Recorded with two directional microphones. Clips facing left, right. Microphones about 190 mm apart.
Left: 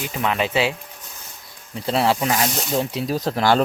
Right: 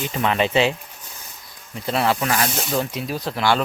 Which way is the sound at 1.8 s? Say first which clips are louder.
Left 1 dB; 30° left (ahead or behind).